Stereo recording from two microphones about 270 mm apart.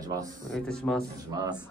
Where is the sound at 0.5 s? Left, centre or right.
Centre.